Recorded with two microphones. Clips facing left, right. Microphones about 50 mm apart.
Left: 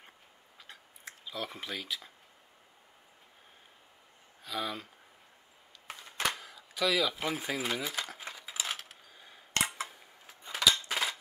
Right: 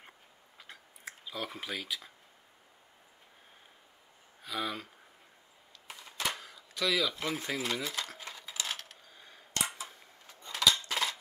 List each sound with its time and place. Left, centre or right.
0.6 s a sound: centre
4.4 s speech: centre
5.9 s a sound: left
6.3 s speech: centre
8.4 s coin: centre
9.8 s cutlery: centre